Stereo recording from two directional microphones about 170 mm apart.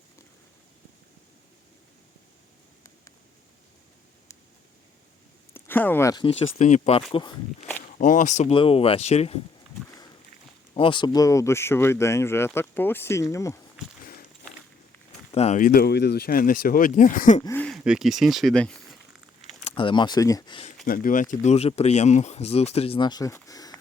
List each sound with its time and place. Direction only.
5.5 s speech: 10° left (ahead or behind)
6.4 s speech: 45° left (ahead or behind)
7.1 s speech: 25° left (ahead or behind)
7.9 s speech: 50° left (ahead or behind)
8.5 s speech: 30° left (ahead or behind)
10.8 s speech: 30° left (ahead or behind)
15.3 s speech: 40° left (ahead or behind)
17.4 s speech: 10° left (ahead or behind)
17.7 s speech: 5° right (ahead or behind)
19.6 s speech: 30° left (ahead or behind)
20.8 s speech: 55° left (ahead or behind)
21.4 s speech: 40° left (ahead or behind); by 23.7 s 20° left (ahead or behind)